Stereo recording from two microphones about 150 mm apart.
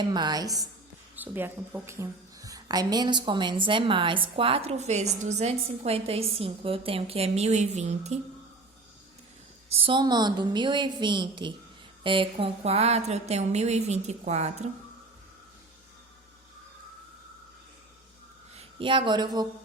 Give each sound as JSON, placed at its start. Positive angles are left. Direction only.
{"t": 0.0, "sound": "a woman's voice", "side_deg": -30}
{"t": 1.1, "sound": "a woman's voice", "side_deg": -10}
{"t": 9.6, "sound": "a woman's voice", "side_deg": -40}
{"t": 18.5, "sound": "speech", "side_deg": -35}